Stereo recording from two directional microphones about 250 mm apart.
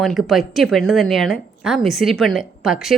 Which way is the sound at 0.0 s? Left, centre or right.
Centre.